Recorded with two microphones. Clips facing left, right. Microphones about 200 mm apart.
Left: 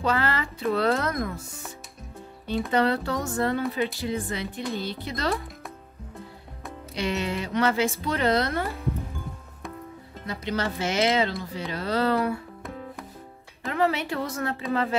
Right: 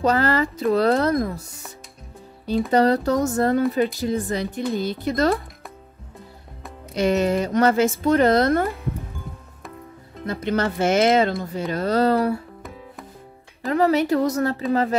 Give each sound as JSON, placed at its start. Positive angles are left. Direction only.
{"t": 0.0, "sound": "speech", "side_deg": -40}
{"t": 2.7, "sound": "speech", "side_deg": -40}
{"t": 7.0, "sound": "speech", "side_deg": -45}
{"t": 10.2, "sound": "speech", "side_deg": -50}
{"t": 13.7, "sound": "speech", "side_deg": -40}